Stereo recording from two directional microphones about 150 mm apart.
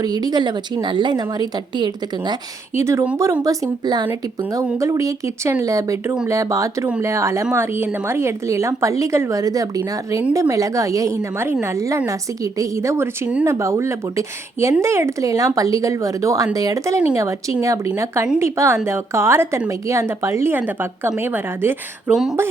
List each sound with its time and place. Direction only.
0.0 s a woman's voice: 25° right (ahead or behind)
2.8 s a woman's voice: 15° right (ahead or behind)
22.1 s speech: 5° right (ahead or behind)